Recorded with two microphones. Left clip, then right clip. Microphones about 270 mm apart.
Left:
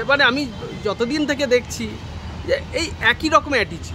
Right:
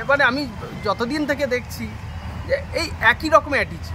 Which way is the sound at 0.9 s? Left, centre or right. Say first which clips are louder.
Even; centre.